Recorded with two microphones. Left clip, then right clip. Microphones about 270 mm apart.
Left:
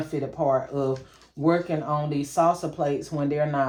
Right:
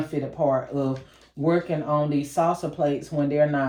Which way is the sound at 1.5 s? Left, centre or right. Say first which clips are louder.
Even; centre.